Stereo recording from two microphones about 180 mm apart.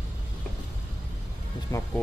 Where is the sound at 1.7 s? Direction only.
15° left (ahead or behind).